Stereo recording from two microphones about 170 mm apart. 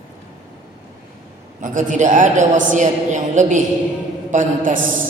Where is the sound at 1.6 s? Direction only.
50° right (ahead or behind).